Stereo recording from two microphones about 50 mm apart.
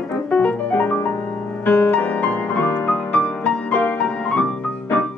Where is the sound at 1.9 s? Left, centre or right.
Left.